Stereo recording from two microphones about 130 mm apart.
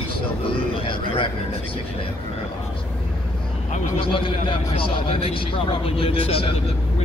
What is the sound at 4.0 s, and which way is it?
A man's voice, 40° left (ahead or behind).